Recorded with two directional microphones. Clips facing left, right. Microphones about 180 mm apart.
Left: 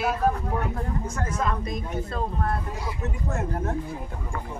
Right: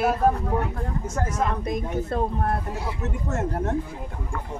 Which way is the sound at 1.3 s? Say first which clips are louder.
Right 2 dB; 55° right (ahead or behind).